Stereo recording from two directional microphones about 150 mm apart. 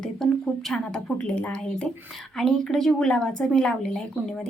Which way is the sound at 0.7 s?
5° left (ahead or behind).